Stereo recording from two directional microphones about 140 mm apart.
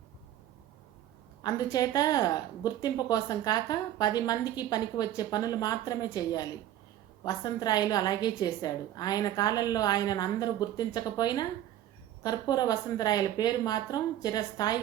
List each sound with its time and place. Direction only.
1.5 s speech: 25° left (ahead or behind)